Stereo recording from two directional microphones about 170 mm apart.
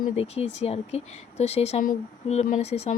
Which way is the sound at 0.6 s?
35° left (ahead or behind).